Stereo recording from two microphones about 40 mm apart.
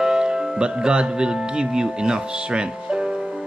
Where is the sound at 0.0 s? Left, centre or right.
Centre.